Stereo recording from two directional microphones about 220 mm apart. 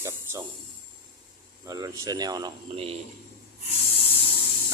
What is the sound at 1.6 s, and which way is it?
Speech, 15° right (ahead or behind).